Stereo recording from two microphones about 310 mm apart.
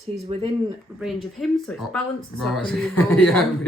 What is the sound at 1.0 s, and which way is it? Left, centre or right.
Speech, centre.